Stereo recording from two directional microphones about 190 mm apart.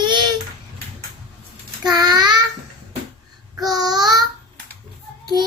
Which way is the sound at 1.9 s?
20° right (ahead or behind).